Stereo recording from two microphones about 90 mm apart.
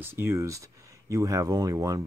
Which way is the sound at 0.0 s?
25° right (ahead or behind).